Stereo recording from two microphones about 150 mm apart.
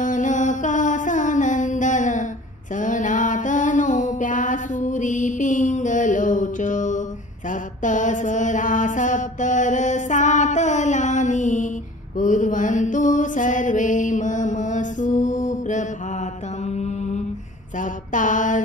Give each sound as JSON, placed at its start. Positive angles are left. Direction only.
{"t": 0.0, "sound": "music", "side_deg": 60}
{"t": 2.7, "sound": "a sound", "side_deg": 60}
{"t": 12.2, "sound": "mantra", "side_deg": 60}
{"t": 17.7, "sound": "mantra", "side_deg": 60}